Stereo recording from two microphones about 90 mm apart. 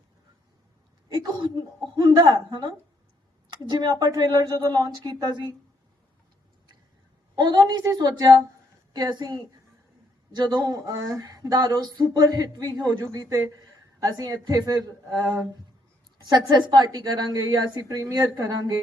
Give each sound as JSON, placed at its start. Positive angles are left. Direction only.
{"t": 1.1, "sound": "speech", "side_deg": -55}
{"t": 7.3, "sound": "speech", "side_deg": -55}
{"t": 14.0, "sound": "speech", "side_deg": -45}
{"t": 16.1, "sound": "speech", "side_deg": -50}